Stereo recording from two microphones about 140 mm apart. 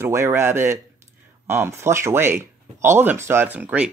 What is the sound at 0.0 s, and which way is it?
Speech, 20° right (ahead or behind).